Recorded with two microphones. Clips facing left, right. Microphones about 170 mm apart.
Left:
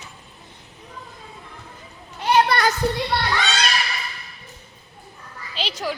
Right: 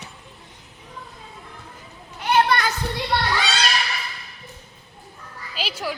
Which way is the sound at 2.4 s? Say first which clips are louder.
Left 1 dB; 35° left (ahead or behind).